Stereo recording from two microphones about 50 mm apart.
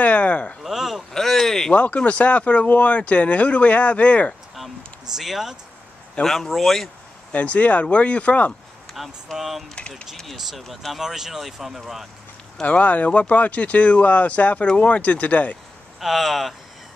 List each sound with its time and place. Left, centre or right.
0.0 s speech: left
0.7 s a sound: centre
1.1 s a sound: centre
1.7 s speech: left
5.1 s speech: centre
7.3 s speech: left
8.9 s speech: centre
9.8 s speech: centre
10.2 s speech: centre
12.6 s speech: left
16.0 s speech: centre